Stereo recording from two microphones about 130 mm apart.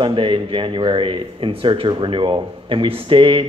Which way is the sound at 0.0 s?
40° right (ahead or behind).